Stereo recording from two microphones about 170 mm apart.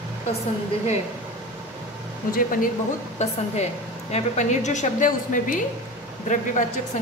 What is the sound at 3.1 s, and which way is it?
A woman's voice, 40° left (ahead or behind).